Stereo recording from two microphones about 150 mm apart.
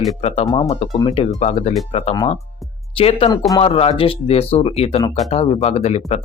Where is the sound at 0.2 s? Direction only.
45° left (ahead or behind).